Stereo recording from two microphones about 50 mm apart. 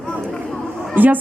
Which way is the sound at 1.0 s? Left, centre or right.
Right.